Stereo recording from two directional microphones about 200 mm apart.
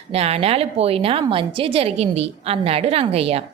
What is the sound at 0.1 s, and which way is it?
A woman's voice, 30° right (ahead or behind).